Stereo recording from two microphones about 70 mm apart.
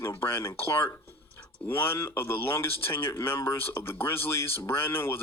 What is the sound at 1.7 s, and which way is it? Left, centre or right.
Speech, left.